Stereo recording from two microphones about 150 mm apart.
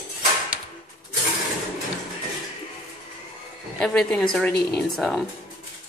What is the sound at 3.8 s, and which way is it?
Speech, 5° left (ahead or behind).